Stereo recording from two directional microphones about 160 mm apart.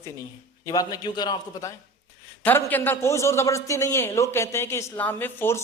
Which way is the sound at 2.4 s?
10° left (ahead or behind).